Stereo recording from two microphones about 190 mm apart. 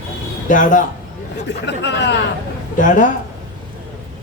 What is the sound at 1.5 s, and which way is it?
Speech, 65° left (ahead or behind).